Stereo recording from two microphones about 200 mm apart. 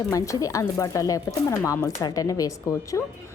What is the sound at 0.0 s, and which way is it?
Speech, 15° left (ahead or behind).